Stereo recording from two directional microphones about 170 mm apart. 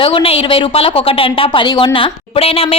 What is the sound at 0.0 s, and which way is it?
Speech, 35° left (ahead or behind).